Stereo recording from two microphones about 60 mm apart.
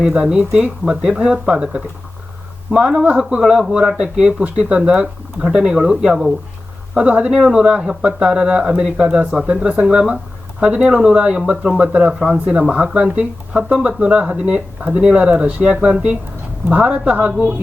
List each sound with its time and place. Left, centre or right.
0.0 s speech: centre